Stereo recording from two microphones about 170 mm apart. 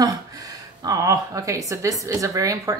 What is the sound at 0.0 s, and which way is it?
Speech, 20° right (ahead or behind).